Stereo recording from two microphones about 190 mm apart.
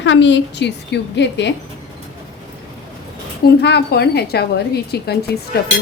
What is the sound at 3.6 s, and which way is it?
A woman's voice, 60° left (ahead or behind).